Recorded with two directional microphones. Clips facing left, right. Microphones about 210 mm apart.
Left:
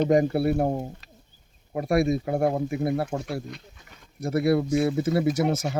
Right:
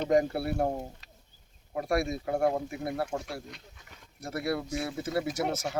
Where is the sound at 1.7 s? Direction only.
15° left (ahead or behind).